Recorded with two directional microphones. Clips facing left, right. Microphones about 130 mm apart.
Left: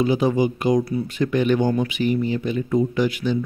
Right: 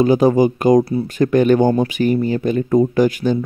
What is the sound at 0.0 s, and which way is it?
Speech, 45° right (ahead or behind).